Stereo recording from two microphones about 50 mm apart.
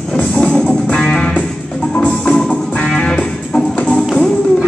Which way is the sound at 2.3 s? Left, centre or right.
Centre.